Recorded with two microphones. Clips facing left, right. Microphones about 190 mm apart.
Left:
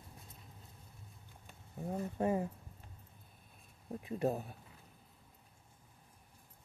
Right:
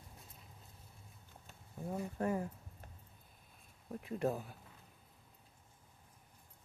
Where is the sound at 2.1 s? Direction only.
20° left (ahead or behind).